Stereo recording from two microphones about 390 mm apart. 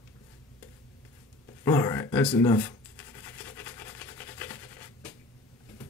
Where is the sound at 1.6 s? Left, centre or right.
Centre.